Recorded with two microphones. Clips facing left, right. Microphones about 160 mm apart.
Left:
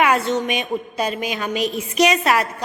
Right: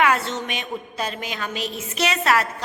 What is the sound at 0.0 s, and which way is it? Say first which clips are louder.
A woman's voice: left 3 dB; 15° left (ahead or behind).